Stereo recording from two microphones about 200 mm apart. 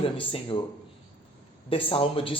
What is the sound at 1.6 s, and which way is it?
Speech, 25° left (ahead or behind).